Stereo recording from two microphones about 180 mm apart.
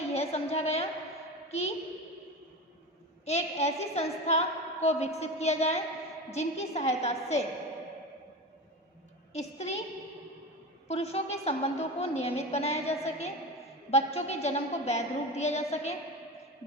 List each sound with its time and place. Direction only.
0.0 s a woman's voice: 35° left (ahead or behind)
3.2 s a woman's voice: 35° left (ahead or behind)
9.3 s a woman's voice: 40° left (ahead or behind)
10.8 s a woman's voice: 35° left (ahead or behind)